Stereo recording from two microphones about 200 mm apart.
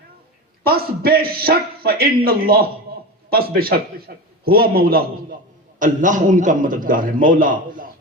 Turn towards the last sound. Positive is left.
turn(degrees=-45)  # may be behind; listen again after turning